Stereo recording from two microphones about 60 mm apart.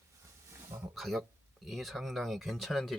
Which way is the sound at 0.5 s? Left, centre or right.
Right.